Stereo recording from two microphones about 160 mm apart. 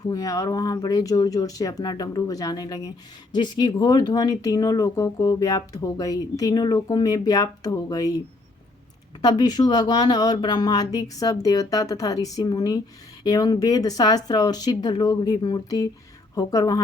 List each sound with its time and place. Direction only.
0.0 s speech: 25° left (ahead or behind)
9.2 s speech: 25° left (ahead or behind)